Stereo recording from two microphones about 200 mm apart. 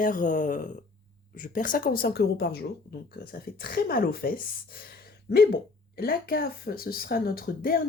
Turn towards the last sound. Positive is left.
turn(degrees=50)  # may be behind; listen again after turning